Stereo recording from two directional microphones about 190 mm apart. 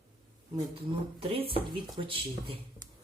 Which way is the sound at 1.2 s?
30° right (ahead or behind).